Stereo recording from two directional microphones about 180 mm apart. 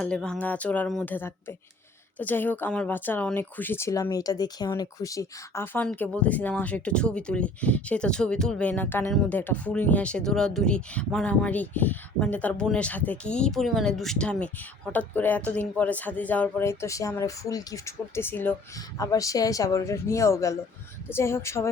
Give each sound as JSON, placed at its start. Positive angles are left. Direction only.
{"t": 0.0, "sound": "speech", "side_deg": 5}